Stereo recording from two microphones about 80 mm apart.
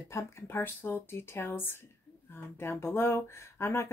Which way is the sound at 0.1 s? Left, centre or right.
Left.